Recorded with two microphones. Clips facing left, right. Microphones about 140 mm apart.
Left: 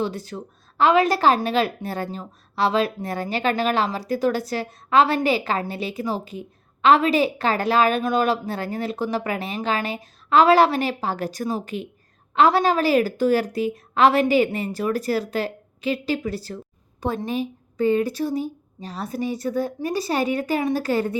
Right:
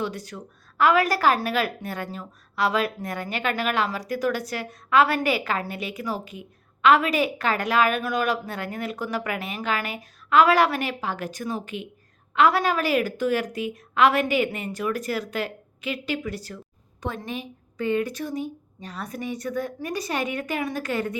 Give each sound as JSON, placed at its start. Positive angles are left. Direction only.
{"t": 0.0, "sound": "a woman's voice", "side_deg": 30}